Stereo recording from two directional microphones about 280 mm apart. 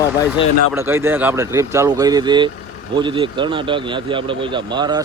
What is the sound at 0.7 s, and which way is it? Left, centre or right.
A man's voice, centre.